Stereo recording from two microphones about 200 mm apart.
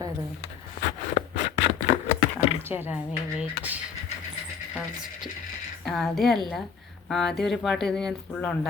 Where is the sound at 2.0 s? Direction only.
30° left (ahead or behind).